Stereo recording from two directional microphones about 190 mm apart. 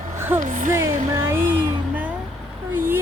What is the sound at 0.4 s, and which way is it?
Speech, 45° right (ahead or behind).